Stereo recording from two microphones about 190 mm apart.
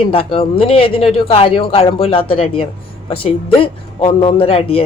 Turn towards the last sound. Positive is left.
turn(degrees=30)  # may be behind; listen again after turning